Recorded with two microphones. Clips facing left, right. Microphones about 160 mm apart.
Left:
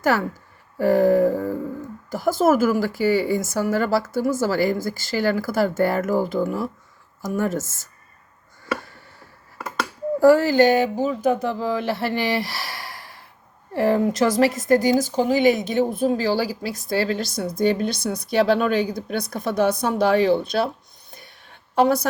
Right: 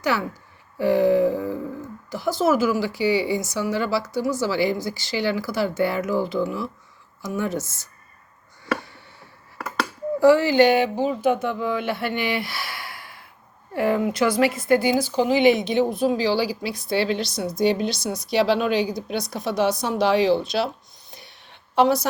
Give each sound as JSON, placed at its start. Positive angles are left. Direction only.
{"t": 0.0, "sound": "a woman's voice", "side_deg": 45}
{"t": 10.2, "sound": "a woman's voice", "side_deg": 45}
{"t": 21.1, "sound": "a sound", "side_deg": 50}